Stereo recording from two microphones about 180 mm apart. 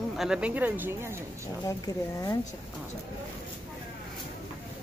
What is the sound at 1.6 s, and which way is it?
Speech, 20° left (ahead or behind).